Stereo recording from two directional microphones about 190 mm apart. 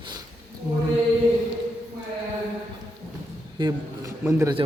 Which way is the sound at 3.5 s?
20° right (ahead or behind).